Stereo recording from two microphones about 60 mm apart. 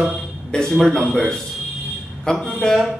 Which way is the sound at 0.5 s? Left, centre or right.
Centre.